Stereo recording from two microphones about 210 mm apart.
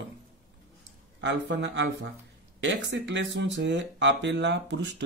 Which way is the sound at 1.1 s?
60° right (ahead or behind).